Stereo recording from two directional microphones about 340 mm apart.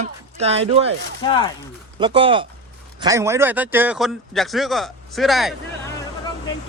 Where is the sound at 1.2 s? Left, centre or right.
Centre.